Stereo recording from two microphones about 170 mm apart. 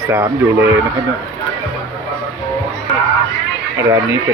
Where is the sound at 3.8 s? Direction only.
15° right (ahead or behind).